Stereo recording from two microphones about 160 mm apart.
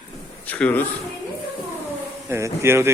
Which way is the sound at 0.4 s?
10° left (ahead or behind).